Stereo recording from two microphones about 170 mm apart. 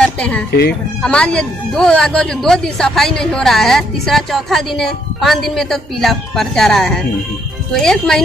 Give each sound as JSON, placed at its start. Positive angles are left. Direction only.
{"t": 0.0, "sound": "a sound", "side_deg": 5}
{"t": 0.5, "sound": "speech", "side_deg": 75}
{"t": 1.0, "sound": "speech", "side_deg": 5}